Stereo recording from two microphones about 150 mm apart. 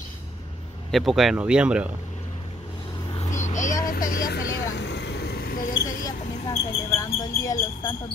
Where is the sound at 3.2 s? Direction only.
50° left (ahead or behind); by 4.5 s 75° left (ahead or behind).